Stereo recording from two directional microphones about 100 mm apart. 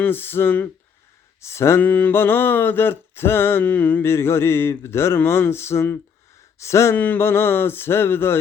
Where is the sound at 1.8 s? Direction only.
15° left (ahead or behind).